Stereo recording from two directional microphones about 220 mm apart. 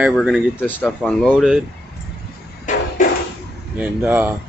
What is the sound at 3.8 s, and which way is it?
Speech, 10° right (ahead or behind).